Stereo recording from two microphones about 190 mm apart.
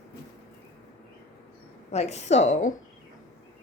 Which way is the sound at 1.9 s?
35° left (ahead or behind).